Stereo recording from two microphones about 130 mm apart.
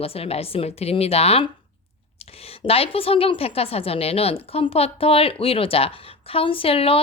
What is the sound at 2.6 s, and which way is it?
A woman's voice, 45° left (ahead or behind).